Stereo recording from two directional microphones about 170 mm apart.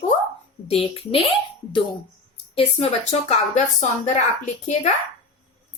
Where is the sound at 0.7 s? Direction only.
35° left (ahead or behind).